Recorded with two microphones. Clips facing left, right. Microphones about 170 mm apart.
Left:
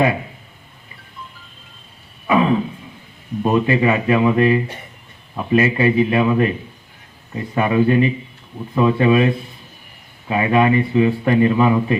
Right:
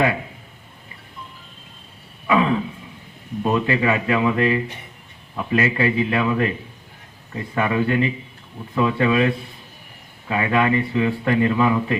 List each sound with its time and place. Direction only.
2.2 s a sound: 15° left (ahead or behind)
3.4 s a man's voice: 15° left (ahead or behind)
7.5 s a man's voice: 15° left (ahead or behind)